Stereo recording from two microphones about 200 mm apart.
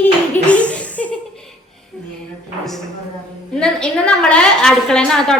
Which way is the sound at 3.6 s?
5° left (ahead or behind).